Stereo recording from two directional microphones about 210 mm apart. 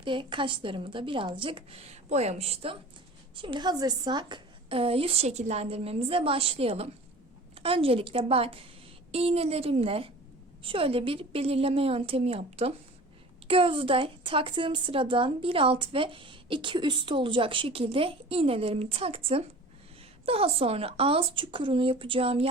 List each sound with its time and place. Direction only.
0.0 s a woman's voice: 25° right (ahead or behind)